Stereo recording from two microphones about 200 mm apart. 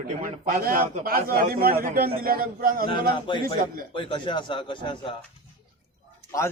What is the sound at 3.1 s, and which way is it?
Speech, 25° left (ahead or behind).